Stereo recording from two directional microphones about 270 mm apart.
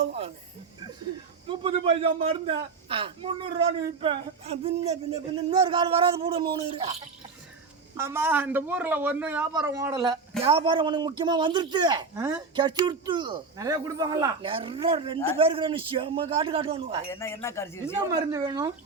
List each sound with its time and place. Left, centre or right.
0.0 s music: right
1.5 s a man's voice: centre
7.9 s a man's voice: centre
17.1 s speech: centre
17.8 s a man's voice: centre